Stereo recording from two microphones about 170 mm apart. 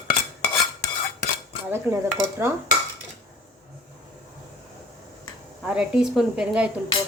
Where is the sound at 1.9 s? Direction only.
15° right (ahead or behind).